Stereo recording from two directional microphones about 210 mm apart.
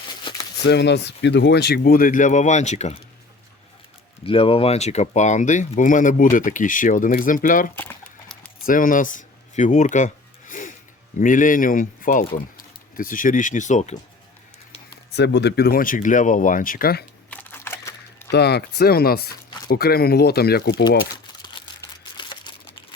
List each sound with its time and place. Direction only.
0.6 s speech: 55° left (ahead or behind); by 3.0 s 35° left (ahead or behind)
4.3 s speech: 25° left (ahead or behind)
7.8 s crumpling: 5° left (ahead or behind)
8.6 s a sound: 40° left (ahead or behind)
11.2 s speech: 40° left (ahead or behind)
15.1 s speech: 55° left (ahead or behind)
17.2 s camera: 10° left (ahead or behind)
18.3 s speech: 50° left (ahead or behind)
21.4 s crumpling: 20° left (ahead or behind)